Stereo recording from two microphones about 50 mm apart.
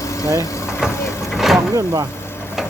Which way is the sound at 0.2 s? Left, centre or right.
Left.